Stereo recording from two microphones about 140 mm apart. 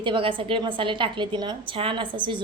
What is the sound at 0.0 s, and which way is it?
A woman's voice, 35° right (ahead or behind).